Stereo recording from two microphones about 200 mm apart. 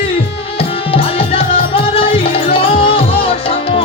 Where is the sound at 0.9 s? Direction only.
30° left (ahead or behind).